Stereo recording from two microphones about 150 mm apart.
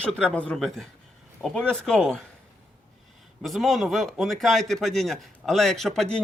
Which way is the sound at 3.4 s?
Centre (ahead or behind).